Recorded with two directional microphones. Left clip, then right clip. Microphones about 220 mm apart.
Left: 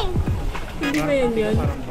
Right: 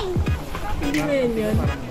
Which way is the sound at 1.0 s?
45° left (ahead or behind).